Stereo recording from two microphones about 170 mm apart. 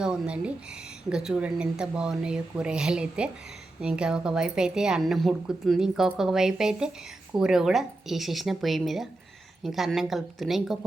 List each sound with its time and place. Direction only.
0.0 s a woman's voice: 5° right (ahead or behind)